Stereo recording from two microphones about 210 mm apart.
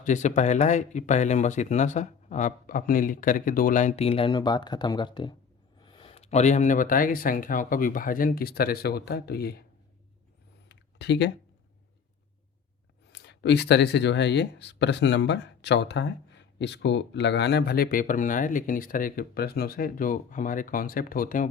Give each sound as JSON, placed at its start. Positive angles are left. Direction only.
{"t": 0.0, "sound": "speech", "side_deg": 35}
{"t": 10.7, "sound": "a sound", "side_deg": 55}
{"t": 13.1, "sound": "speech", "side_deg": 55}